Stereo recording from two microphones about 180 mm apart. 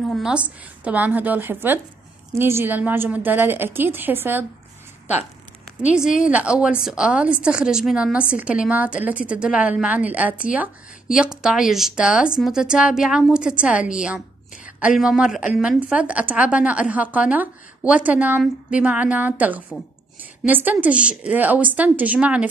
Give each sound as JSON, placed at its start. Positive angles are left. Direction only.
{"t": 0.0, "sound": "a woman's voice", "side_deg": 0}
{"t": 5.8, "sound": "a woman's voice", "side_deg": -5}
{"t": 6.0, "sound": "speech", "side_deg": 45}
{"t": 6.3, "sound": "a woman's voice", "side_deg": -5}